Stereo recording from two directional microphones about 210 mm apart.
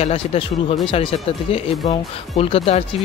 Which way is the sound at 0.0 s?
30° left (ahead or behind).